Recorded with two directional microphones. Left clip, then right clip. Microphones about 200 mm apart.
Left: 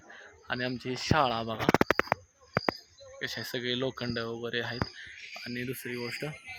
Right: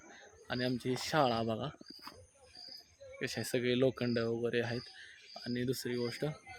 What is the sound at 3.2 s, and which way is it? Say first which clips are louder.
Speech: left 1 dB; 45° right (ahead or behind).